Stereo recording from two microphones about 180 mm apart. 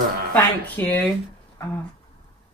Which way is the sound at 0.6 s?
10° left (ahead or behind).